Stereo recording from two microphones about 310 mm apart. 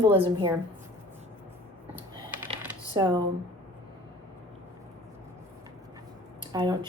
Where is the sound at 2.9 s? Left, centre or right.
Centre.